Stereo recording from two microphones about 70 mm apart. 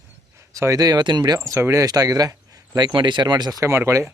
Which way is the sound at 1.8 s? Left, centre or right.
Right.